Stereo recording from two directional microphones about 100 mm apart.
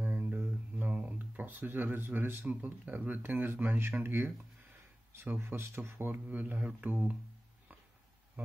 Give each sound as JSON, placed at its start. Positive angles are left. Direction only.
{"t": 0.0, "sound": "speech", "side_deg": -20}